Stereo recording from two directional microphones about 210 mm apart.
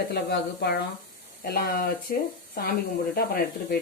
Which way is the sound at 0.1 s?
50° left (ahead or behind).